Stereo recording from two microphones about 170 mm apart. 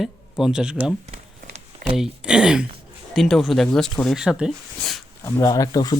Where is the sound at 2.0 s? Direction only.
5° right (ahead or behind).